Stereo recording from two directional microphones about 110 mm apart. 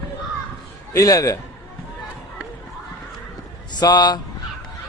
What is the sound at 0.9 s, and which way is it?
Speech, 30° left (ahead or behind).